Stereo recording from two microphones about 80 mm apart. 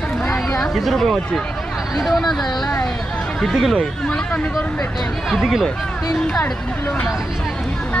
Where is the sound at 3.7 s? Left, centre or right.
Centre.